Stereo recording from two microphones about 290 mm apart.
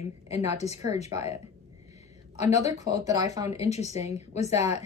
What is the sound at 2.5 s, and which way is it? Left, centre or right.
Speech, centre.